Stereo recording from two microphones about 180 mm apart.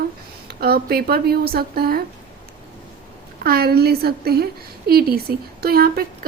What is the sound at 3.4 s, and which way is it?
A woman's voice, 60° right (ahead or behind).